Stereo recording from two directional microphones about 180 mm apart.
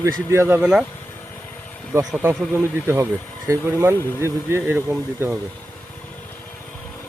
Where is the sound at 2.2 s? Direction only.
15° right (ahead or behind).